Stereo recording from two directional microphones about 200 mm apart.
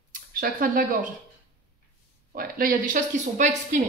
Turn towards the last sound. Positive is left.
turn(degrees=-40)  # may be behind; listen again after turning